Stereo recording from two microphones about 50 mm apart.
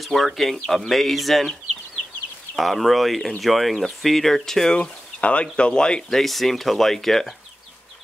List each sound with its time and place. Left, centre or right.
0.0 s speech: centre
2.5 s speech: centre
5.2 s speech: left
6.0 s speech: centre